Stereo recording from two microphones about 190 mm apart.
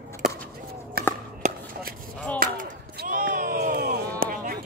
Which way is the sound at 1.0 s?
55° right (ahead or behind).